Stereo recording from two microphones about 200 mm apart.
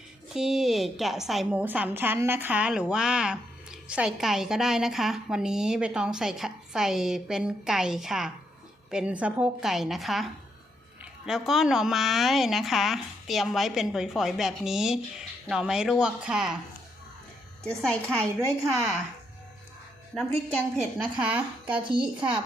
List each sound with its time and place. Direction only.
0.3 s a woman's voice: centre (ahead or behind)
11.3 s a woman's voice: centre (ahead or behind)
17.6 s a woman's voice: 5° left (ahead or behind)
20.7 s a woman's voice: 5° right (ahead or behind)
21.8 s a woman's voice: 25° right (ahead or behind)